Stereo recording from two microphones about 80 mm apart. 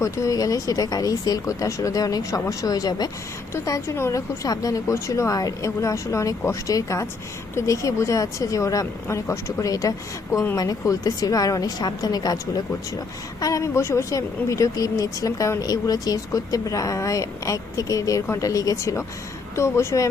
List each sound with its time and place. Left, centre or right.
0.0 s a woman's voice: left
3.5 s a woman's voice: left
4.4 s a woman's voice: left
13.4 s a woman's voice: left